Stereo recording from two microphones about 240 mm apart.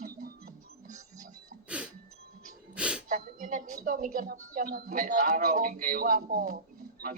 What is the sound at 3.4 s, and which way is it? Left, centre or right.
Speech, right.